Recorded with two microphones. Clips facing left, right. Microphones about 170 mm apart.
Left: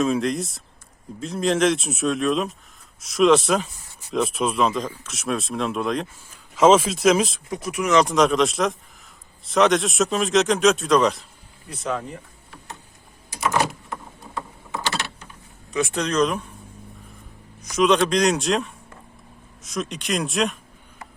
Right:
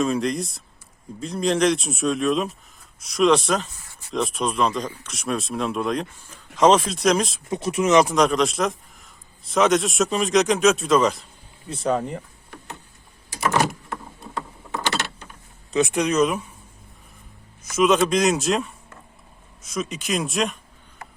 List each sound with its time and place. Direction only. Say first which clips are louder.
0.0 s speech: left 1 dB; centre (ahead or behind)
7.5 s speech: right 5 dB; 25° right (ahead or behind)
8.0 s speech: left 1 dB; centre (ahead or behind)
11.7 s speech: right 5 dB; 30° right (ahead or behind)
15.7 s speech: right 3 dB; 20° right (ahead or behind)
17.6 s speech: even; centre (ahead or behind)